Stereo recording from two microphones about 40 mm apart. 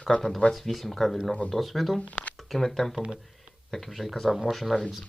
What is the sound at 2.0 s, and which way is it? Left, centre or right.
Speech, left.